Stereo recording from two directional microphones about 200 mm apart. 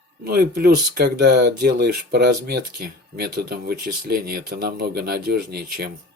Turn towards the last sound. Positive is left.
turn(degrees=-50)  # may be behind; listen again after turning